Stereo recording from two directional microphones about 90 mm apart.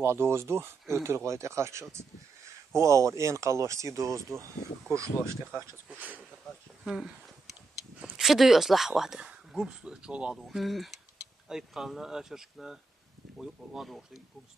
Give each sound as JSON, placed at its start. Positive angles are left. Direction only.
{"t": 0.0, "sound": "speech", "side_deg": -30}
{"t": 5.9, "sound": "speech", "side_deg": -15}
{"t": 6.8, "sound": "speech", "side_deg": -5}